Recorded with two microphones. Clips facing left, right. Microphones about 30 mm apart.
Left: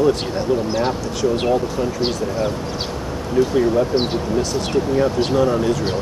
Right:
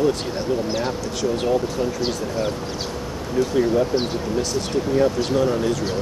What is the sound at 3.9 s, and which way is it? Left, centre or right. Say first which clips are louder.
Speech: left 3 dB; left.